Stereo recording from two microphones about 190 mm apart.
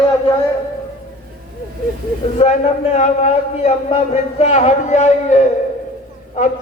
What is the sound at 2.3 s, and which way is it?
A man's voice, 35° left (ahead or behind).